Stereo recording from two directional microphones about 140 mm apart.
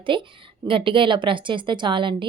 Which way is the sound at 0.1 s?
35° right (ahead or behind).